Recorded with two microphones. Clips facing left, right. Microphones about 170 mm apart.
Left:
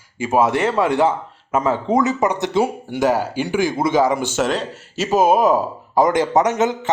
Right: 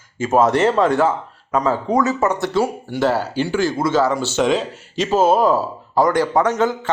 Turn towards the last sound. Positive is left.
turn(degrees=20)  # may be behind; listen again after turning